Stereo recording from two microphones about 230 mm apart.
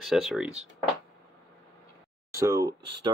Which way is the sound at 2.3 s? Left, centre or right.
Centre.